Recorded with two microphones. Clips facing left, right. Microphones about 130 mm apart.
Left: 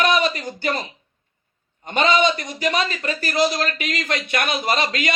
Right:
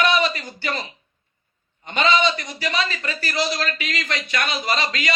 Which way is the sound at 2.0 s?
45° left (ahead or behind).